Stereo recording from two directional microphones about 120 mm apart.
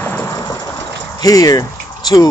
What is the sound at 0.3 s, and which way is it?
Speech, 35° left (ahead or behind).